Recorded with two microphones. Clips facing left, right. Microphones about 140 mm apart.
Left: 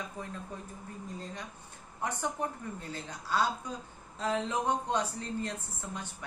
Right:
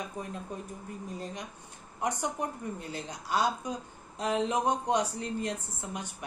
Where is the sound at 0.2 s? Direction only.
15° right (ahead or behind).